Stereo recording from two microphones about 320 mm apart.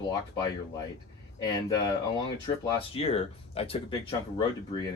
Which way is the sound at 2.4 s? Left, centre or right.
Centre.